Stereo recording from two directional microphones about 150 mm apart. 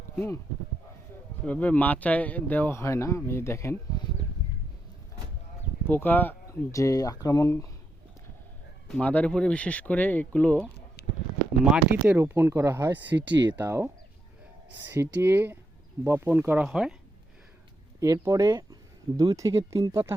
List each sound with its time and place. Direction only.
1.5 s speech: 10° left (ahead or behind)
5.9 s speech: 15° left (ahead or behind)
8.9 s speech: 10° left (ahead or behind)
11.0 s a sound: 90° left
11.6 s speech: 10° right (ahead or behind)
18.0 s speech: 20° right (ahead or behind)